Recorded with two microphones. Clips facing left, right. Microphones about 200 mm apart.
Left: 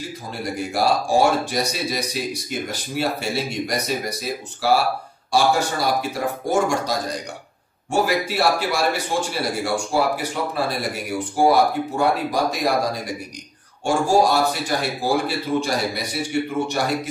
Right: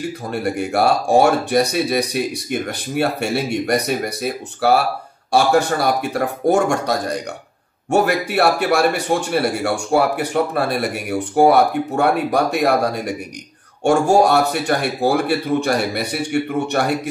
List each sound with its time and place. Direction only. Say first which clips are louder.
0.3 s a man's voice: right 5 dB; 60° right (ahead or behind)